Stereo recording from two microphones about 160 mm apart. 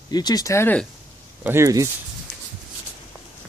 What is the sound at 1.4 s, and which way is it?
Speech, 20° right (ahead or behind).